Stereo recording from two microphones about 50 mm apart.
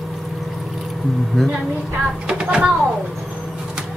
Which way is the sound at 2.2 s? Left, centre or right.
Centre.